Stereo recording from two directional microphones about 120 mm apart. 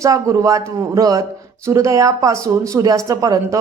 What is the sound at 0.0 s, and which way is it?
Speech, 25° right (ahead or behind).